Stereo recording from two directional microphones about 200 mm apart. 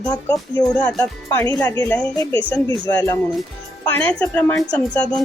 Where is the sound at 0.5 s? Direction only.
5° left (ahead or behind).